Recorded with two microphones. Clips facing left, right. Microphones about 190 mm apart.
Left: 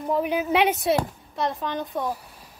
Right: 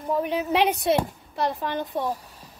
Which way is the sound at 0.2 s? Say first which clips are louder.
Left 1 dB; 5° left (ahead or behind).